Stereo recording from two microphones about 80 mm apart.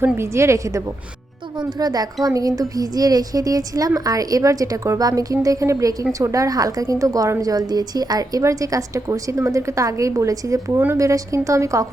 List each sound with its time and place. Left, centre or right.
0.0 s a woman's voice: right
1.5 s a woman's voice: right
10.7 s a woman's voice: right